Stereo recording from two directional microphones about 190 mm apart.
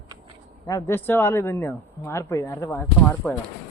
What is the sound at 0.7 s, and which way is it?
Speech, 15° left (ahead or behind).